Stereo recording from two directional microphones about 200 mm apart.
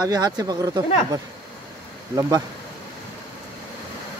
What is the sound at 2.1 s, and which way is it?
Speech, 15° right (ahead or behind).